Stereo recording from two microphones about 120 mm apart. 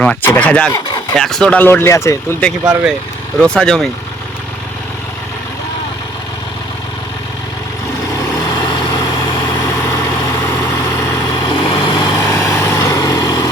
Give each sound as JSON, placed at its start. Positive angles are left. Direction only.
{"t": 0.0, "sound": "speech", "side_deg": 10}
{"t": 3.4, "sound": "speech", "side_deg": 5}
{"t": 8.4, "sound": "vehicle", "side_deg": 35}
{"t": 9.6, "sound": "vehicle", "side_deg": 20}
{"t": 11.3, "sound": "vehicle", "side_deg": 35}
{"t": 12.2, "sound": "vehicle", "side_deg": 20}